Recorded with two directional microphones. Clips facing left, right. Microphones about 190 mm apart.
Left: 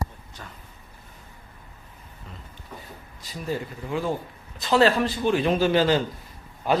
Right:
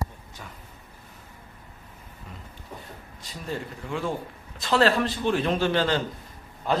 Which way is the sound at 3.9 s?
5° left (ahead or behind).